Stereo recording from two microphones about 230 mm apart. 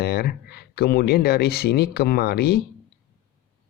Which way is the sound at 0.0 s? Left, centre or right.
Left.